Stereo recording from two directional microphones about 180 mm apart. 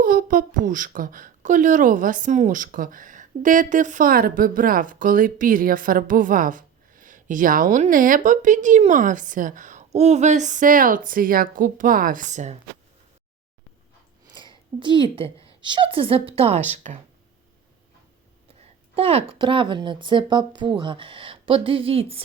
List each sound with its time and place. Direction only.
0.0 s speech: 50° right (ahead or behind)
14.8 s a woman's voice: 25° right (ahead or behind)
18.9 s speech: 35° right (ahead or behind)